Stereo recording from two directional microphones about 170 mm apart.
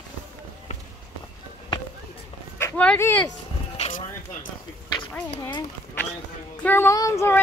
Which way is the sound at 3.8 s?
40° left (ahead or behind).